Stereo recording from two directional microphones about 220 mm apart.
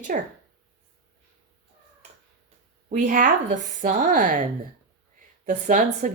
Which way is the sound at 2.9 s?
35° right (ahead or behind).